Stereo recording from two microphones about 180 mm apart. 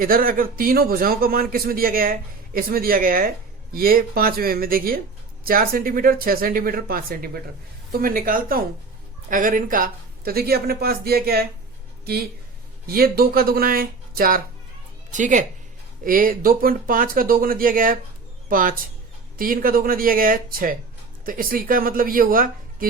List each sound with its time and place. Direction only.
0.0 s a man's voice: 50° right (ahead or behind)
12.9 s a man's voice: 55° right (ahead or behind)